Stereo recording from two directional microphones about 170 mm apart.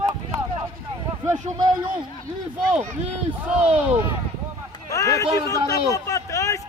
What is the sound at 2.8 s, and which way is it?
Speech, 45° right (ahead or behind).